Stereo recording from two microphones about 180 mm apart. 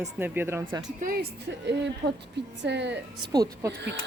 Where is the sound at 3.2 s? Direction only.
20° right (ahead or behind).